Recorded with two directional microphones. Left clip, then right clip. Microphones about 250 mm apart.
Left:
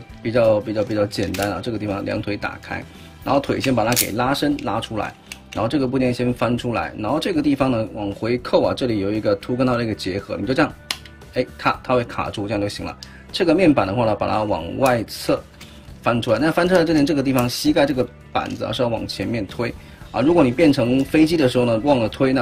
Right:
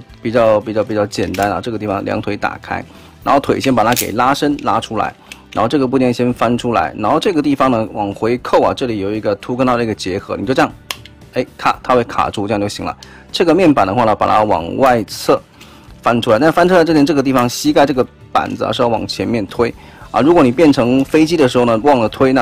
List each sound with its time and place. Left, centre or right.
0.2 s speech: centre